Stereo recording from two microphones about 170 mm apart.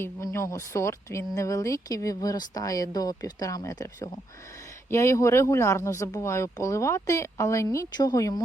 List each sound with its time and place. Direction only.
0.0 s speech: 15° left (ahead or behind)